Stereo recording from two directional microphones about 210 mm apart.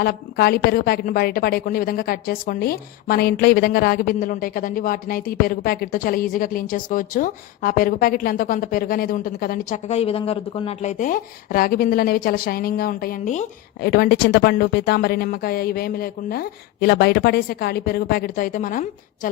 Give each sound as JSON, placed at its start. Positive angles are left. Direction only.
{"t": 0.0, "sound": "a woman's voice", "side_deg": 45}